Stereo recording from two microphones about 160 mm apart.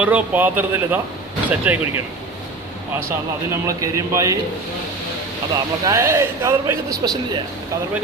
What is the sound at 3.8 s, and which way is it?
Speech, 20° right (ahead or behind).